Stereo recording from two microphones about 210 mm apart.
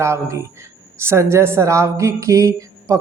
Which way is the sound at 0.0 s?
15° right (ahead or behind).